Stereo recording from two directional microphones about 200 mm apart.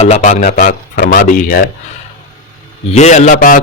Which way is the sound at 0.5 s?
50° left (ahead or behind).